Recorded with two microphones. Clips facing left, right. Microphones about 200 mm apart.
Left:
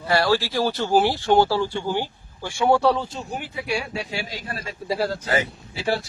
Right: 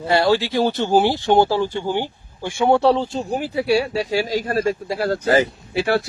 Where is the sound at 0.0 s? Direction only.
20° right (ahead or behind); by 4.7 s 45° right (ahead or behind).